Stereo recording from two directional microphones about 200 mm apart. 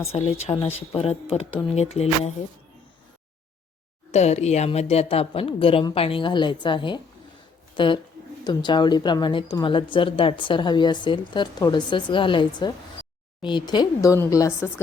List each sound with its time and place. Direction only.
0.1 s a woman's voice: 30° left (ahead or behind)
4.1 s a woman's voice: 35° left (ahead or behind); by 14.7 s 15° left (ahead or behind)